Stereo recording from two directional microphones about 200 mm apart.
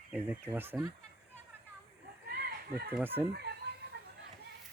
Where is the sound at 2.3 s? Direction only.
50° right (ahead or behind).